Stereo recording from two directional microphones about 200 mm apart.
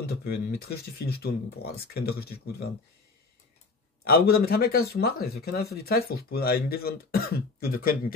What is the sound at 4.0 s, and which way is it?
Speech, 50° left (ahead or behind).